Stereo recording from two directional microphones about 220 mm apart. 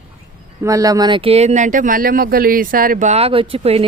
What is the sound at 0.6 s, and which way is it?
Speech, 15° right (ahead or behind).